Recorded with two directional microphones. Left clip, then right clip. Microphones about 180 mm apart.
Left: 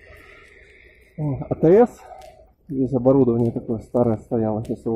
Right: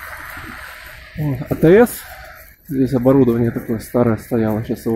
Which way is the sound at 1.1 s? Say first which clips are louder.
Right 3 dB; 15° right (ahead or behind).